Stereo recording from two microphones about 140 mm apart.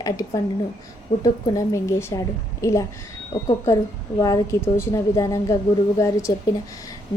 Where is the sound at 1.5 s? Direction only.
20° left (ahead or behind).